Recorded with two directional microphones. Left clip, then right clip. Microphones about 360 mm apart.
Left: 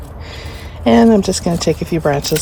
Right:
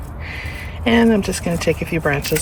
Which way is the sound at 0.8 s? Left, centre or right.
Centre.